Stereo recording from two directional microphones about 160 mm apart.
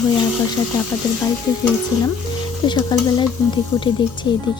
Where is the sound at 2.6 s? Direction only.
25° left (ahead or behind).